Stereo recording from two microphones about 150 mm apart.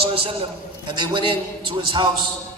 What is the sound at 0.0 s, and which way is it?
A man's voice, 40° right (ahead or behind).